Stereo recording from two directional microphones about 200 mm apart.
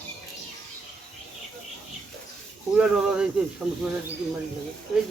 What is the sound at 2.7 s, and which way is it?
Speech, 5° right (ahead or behind).